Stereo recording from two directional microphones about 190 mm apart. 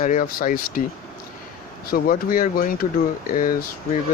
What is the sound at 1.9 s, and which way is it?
Speech, 50° left (ahead or behind).